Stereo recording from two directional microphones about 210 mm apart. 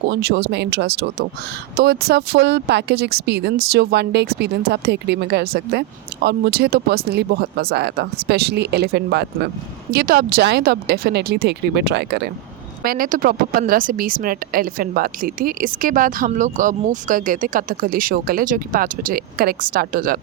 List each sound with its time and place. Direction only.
0.1 s speech: 50° right (ahead or behind)